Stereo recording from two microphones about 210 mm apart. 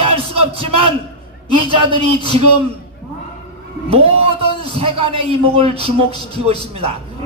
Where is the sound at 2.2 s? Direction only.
25° right (ahead or behind).